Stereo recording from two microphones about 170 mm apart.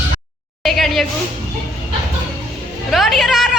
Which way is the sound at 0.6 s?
Centre (ahead or behind).